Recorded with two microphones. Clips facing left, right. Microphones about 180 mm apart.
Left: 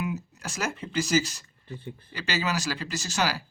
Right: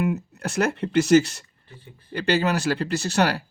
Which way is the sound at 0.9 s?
65° right (ahead or behind).